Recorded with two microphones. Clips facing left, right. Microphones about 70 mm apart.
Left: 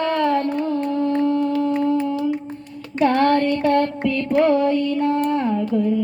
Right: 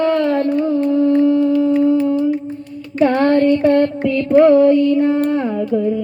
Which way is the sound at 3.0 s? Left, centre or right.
Right.